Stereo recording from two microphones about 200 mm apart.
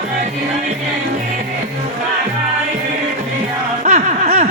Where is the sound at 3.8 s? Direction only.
35° right (ahead or behind).